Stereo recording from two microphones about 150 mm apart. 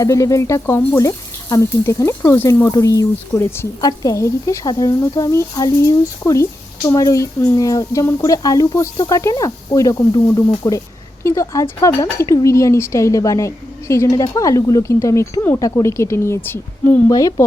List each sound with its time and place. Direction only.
0.0 s speech: 20° left (ahead or behind)